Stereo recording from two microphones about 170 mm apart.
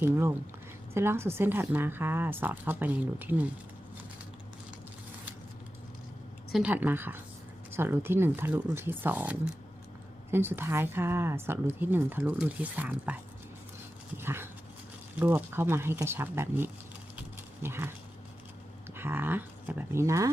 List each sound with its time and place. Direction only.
0.0 s speech: 15° right (ahead or behind)
6.5 s speech: 5° right (ahead or behind)
14.2 s dog: 15° right (ahead or behind)
15.1 s speech: 10° right (ahead or behind)
17.2 s a sound: 15° right (ahead or behind)
18.9 s speech: 15° right (ahead or behind)